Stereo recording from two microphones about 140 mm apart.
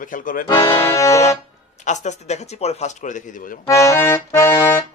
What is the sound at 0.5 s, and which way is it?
Speech, 40° left (ahead or behind).